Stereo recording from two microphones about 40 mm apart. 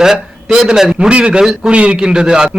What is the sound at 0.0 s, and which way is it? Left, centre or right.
Speech, centre.